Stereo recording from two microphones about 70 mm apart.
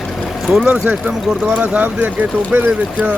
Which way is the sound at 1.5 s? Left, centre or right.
Right.